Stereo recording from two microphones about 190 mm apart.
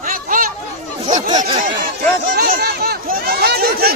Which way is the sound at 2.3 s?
50° right (ahead or behind).